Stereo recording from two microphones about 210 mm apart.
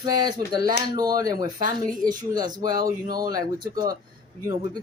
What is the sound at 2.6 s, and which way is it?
Speech, 45° right (ahead or behind).